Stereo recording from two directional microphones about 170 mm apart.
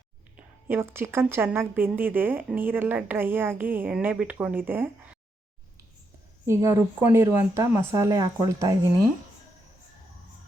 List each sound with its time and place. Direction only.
0.3 s a woman's voice: 15° right (ahead or behind)
6.4 s a woman's voice: 15° right (ahead or behind)